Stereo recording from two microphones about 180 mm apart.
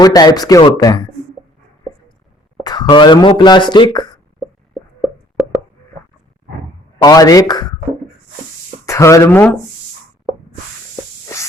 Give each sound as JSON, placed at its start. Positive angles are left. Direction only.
{"t": 0.0, "sound": "speech", "side_deg": 20}
{"t": 2.6, "sound": "speech", "side_deg": 25}
{"t": 7.0, "sound": "speech", "side_deg": 20}
{"t": 8.9, "sound": "speech", "side_deg": 15}